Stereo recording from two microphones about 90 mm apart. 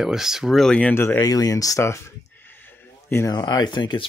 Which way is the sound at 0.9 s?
25° left (ahead or behind).